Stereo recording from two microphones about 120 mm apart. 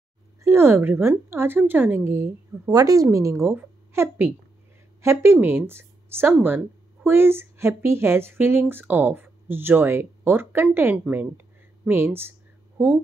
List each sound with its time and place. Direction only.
0.4 s speech: 20° right (ahead or behind)
2.7 s speech: 30° right (ahead or behind)